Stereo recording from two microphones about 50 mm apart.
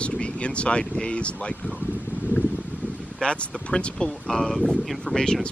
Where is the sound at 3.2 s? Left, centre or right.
Centre.